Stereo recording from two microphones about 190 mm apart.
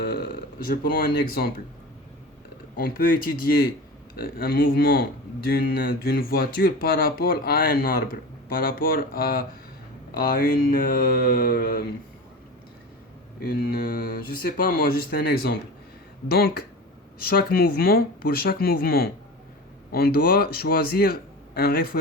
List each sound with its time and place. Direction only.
0.0 s speech: 50° left (ahead or behind)
2.7 s speech: 50° left (ahead or behind)
13.4 s speech: 55° left (ahead or behind)